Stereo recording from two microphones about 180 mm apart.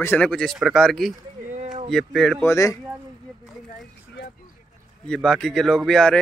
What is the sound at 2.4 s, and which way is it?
Speech, 15° left (ahead or behind).